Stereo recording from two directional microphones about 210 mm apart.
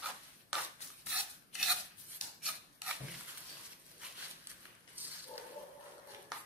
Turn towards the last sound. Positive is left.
turn(degrees=-10)  # may be behind; listen again after turning